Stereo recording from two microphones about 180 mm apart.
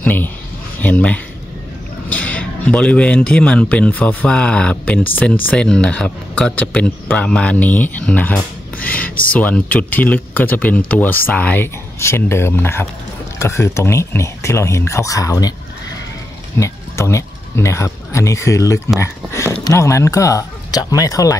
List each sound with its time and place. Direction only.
0.0 s speech: 10° left (ahead or behind)
16.5 s speech: 15° left (ahead or behind)